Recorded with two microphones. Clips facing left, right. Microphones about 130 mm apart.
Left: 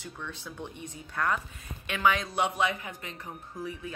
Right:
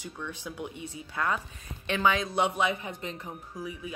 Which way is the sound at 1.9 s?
25° right (ahead or behind).